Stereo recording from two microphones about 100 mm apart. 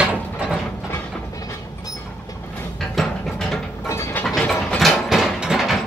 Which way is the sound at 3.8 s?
25° left (ahead or behind).